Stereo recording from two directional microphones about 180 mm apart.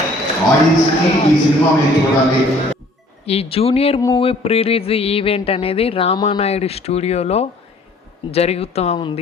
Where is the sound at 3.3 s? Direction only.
35° left (ahead or behind).